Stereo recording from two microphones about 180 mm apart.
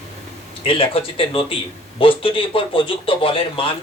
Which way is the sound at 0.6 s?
30° left (ahead or behind).